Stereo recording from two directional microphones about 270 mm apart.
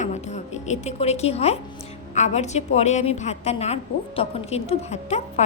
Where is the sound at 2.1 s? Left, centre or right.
Left.